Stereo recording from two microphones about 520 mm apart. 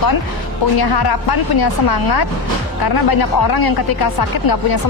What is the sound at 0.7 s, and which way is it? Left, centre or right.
Speech, left.